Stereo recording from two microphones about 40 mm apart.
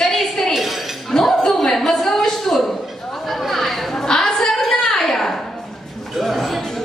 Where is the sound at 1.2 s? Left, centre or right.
Centre.